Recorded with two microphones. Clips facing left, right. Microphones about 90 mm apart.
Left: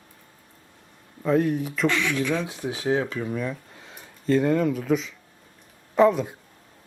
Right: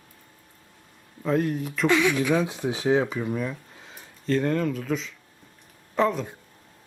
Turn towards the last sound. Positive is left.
turn(degrees=5)  # may be behind; listen again after turning